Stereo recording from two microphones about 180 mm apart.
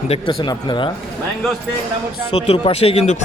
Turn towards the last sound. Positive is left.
turn(degrees=35)  # may be behind; listen again after turning